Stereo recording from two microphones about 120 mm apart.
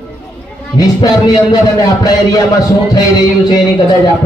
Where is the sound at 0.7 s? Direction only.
35° left (ahead or behind).